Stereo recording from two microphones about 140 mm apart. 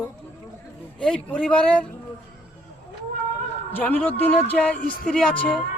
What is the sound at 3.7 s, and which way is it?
Speech, 10° left (ahead or behind).